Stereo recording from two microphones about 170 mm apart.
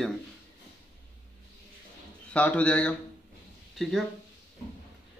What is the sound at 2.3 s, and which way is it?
Speech, 10° left (ahead or behind).